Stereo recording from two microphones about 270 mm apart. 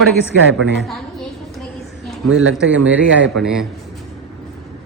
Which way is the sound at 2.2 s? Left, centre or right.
Right.